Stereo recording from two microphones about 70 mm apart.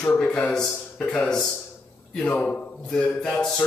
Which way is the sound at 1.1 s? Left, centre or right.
Centre.